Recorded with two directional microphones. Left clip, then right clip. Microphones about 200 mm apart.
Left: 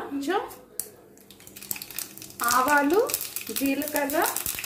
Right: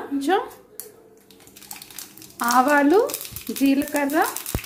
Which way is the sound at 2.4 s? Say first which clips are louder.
Right 4 dB; 40° right (ahead or behind).